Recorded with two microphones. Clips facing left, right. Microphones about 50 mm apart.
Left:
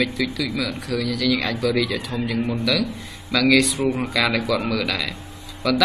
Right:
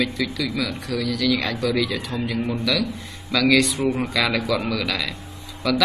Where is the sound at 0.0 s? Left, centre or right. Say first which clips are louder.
Left 1 dB; centre.